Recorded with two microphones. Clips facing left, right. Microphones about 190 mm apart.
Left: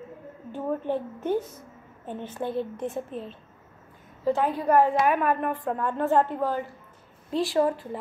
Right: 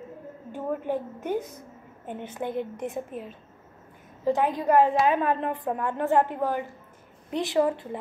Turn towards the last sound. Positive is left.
turn(degrees=-20)  # may be behind; listen again after turning